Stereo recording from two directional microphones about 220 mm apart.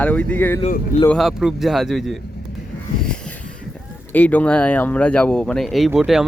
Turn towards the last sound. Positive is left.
turn(degrees=0)  # may be behind; listen again after turning